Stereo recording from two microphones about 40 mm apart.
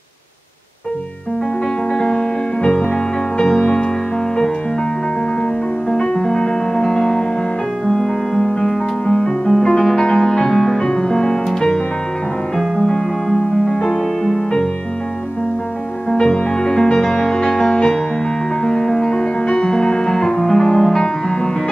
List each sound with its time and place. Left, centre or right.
2.0 s music: centre
5.9 s music: centre
12.8 s music: centre
16.1 s music: centre